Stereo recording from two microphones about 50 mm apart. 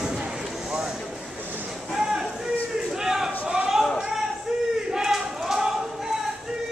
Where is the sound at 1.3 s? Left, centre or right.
Right.